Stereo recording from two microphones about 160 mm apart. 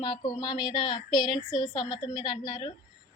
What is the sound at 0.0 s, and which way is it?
A woman's voice, 25° left (ahead or behind).